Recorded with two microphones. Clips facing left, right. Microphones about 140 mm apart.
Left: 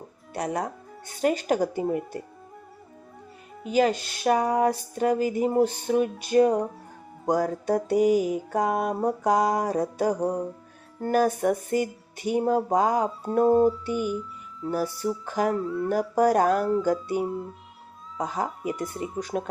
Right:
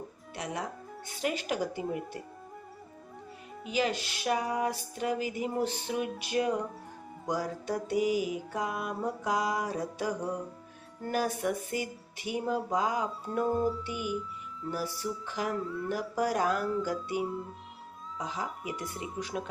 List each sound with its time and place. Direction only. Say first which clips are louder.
0.3 s mantra: left 8 dB; 45° left (ahead or behind)
3.7 s mantra: left 8 dB; 45° left (ahead or behind)